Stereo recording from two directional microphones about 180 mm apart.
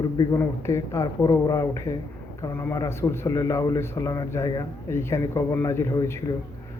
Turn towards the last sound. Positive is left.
turn(degrees=15)  # may be behind; listen again after turning